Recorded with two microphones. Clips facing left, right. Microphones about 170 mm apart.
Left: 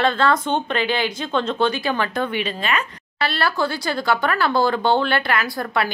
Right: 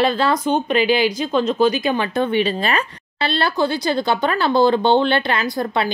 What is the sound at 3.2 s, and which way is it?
Speech, 25° right (ahead or behind).